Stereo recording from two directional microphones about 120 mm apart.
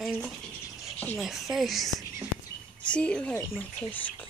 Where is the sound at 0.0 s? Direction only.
Centre (ahead or behind).